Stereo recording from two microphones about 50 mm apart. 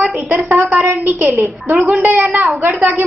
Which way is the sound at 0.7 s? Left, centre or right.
Right.